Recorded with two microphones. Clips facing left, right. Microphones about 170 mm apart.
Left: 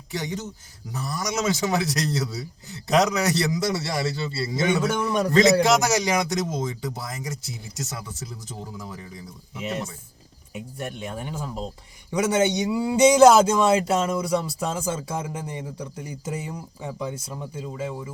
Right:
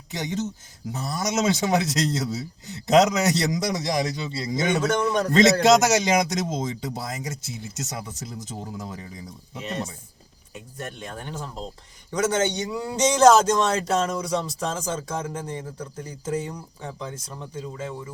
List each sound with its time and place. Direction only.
0.1 s a man's voice: 20° right (ahead or behind)
5.1 s a man's voice: 10° left (ahead or behind)
5.6 s a man's voice: 20° right (ahead or behind)
10.5 s a man's voice: 15° left (ahead or behind)